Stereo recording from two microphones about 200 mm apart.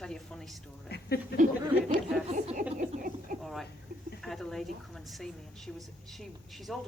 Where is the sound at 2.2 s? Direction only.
35° right (ahead or behind).